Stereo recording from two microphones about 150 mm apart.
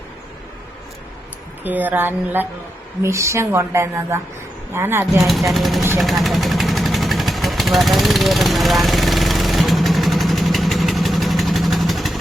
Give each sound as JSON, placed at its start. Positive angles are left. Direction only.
{"t": 1.6, "sound": "a woman's voice", "side_deg": -10}
{"t": 5.1, "sound": "speech", "side_deg": 0}
{"t": 6.0, "sound": "vehicle", "side_deg": 0}